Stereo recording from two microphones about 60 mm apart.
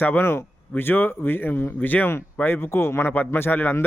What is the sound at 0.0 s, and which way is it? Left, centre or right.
Speech, left.